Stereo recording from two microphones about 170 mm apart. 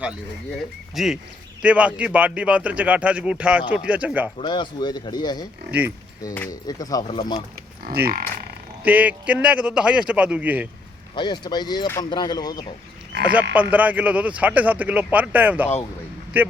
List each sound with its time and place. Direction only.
0.9 s speech: centre (ahead or behind)
4.4 s speech: 25° left (ahead or behind)
6.5 s speech: 20° left (ahead or behind)
7.9 s speech: 65° right (ahead or behind)
8.8 s speech: 10° right (ahead or behind)
11.1 s speech: 25° left (ahead or behind)
13.2 s speech: 10° right (ahead or behind)